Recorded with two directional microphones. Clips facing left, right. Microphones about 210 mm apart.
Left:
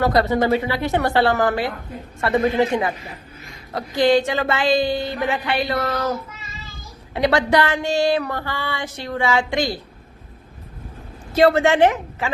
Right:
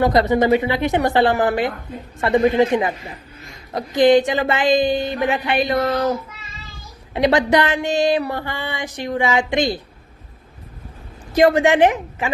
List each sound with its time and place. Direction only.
0.0 s speech: 20° right (ahead or behind)
7.1 s a sound: 20° right (ahead or behind)
11.3 s speech: 15° right (ahead or behind)